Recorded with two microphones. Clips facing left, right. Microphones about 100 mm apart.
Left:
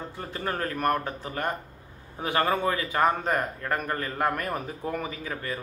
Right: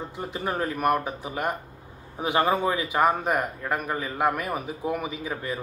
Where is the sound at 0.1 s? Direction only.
15° right (ahead or behind).